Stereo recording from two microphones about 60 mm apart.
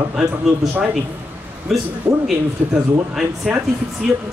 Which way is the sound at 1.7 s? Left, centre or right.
Centre.